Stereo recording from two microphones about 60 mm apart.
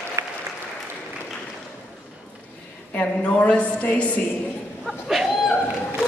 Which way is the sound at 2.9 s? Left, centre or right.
Left.